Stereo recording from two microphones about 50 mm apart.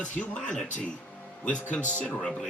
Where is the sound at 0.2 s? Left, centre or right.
Left.